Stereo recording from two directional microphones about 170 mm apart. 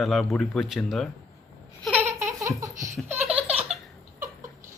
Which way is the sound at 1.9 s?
10° right (ahead or behind).